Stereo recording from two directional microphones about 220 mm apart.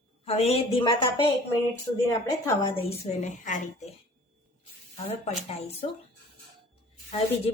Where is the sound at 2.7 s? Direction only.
25° left (ahead or behind).